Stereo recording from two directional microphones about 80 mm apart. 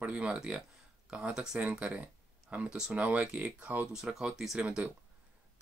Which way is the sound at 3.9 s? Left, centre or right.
Centre.